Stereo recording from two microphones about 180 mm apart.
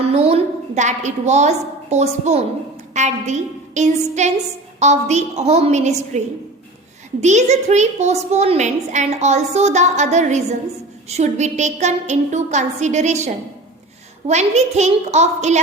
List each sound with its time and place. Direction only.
0.1 s a woman's voice: 35° right (ahead or behind)